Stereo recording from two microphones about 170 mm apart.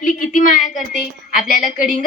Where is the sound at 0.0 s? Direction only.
50° left (ahead or behind).